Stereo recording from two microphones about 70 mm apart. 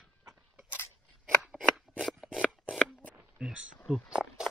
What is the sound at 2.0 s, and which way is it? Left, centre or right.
Shuffling cards, centre.